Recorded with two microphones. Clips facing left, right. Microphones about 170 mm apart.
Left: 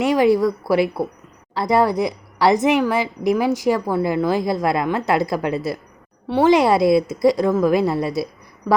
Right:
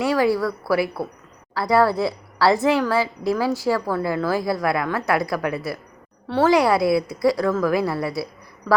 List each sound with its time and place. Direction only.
0.0 s a woman's voice: 20° left (ahead or behind)